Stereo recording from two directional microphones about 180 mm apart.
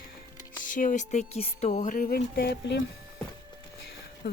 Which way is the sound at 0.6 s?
45° left (ahead or behind).